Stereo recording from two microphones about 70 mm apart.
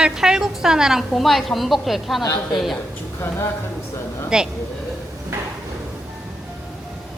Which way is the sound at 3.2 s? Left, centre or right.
Left.